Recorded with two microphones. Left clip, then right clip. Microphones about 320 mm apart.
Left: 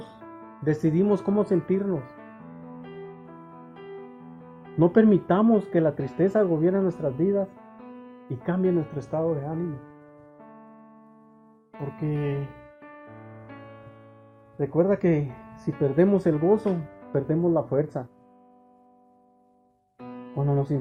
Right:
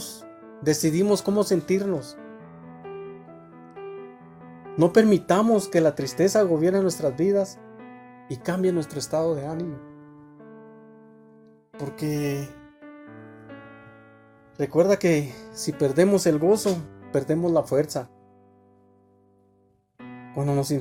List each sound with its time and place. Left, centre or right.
0.6 s speech: right
4.8 s speech: right
8.4 s speech: right
11.8 s speech: right
14.6 s speech: right
20.3 s speech: right